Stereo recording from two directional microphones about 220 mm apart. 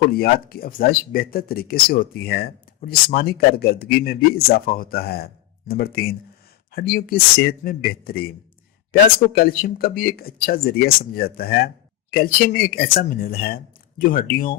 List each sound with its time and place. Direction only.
0.1 s speech: 45° left (ahead or behind)